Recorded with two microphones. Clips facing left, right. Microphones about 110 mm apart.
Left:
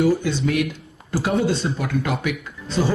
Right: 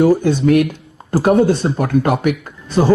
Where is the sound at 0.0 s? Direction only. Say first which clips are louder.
Right 7 dB; 50° right (ahead or behind).